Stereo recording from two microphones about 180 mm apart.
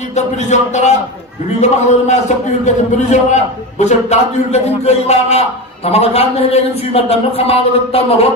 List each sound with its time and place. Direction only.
0.1 s a man's voice: 40° left (ahead or behind)